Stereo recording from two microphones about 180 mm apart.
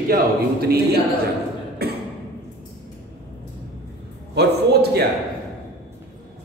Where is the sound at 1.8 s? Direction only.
60° right (ahead or behind).